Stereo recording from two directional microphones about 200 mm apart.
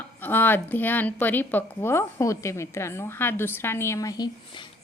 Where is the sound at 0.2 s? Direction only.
10° left (ahead or behind).